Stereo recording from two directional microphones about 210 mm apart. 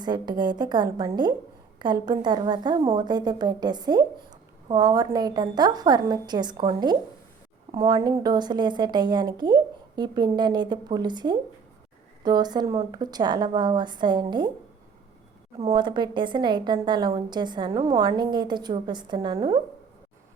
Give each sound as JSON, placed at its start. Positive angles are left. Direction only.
{"t": 0.0, "sound": "a woman's voice", "side_deg": -20}
{"t": 15.5, "sound": "a woman's voice", "side_deg": -25}